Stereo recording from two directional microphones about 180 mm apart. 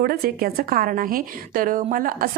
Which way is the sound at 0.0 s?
55° right (ahead or behind).